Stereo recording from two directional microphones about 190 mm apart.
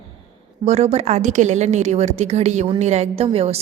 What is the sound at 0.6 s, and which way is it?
A woman's voice, 35° right (ahead or behind).